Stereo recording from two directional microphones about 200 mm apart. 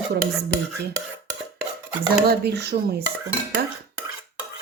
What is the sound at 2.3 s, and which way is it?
Speech, 55° right (ahead or behind).